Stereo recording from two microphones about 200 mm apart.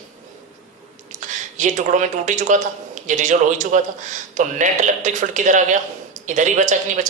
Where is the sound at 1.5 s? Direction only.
40° right (ahead or behind).